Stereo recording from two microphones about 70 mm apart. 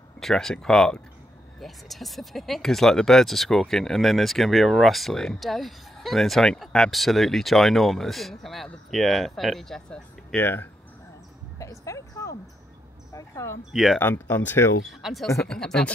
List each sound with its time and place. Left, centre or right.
0.2 s speech: centre
10.3 s speech: left
11.5 s a sound: left
13.1 s speech: left
13.9 s speech: left
14.9 s speech: centre